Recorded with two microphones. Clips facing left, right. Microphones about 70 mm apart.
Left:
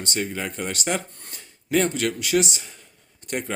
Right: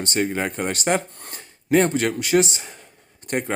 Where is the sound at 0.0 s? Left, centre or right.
Right.